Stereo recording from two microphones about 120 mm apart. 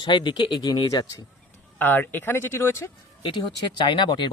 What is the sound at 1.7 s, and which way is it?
Speech, 15° left (ahead or behind).